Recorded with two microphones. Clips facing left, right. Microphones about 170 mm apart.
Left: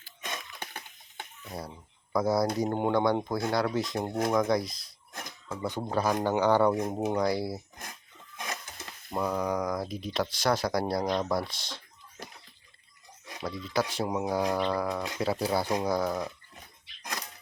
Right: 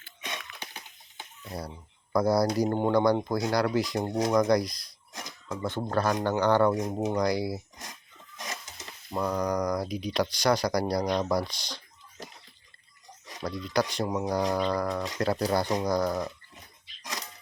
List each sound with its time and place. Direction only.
0.2 s wheeze: 50° left (ahead or behind)
1.5 s speech: centre (ahead or behind)
8.4 s a sound: 55° left (ahead or behind)
9.1 s speech: 5° left (ahead or behind)
13.4 s speech: 5° left (ahead or behind)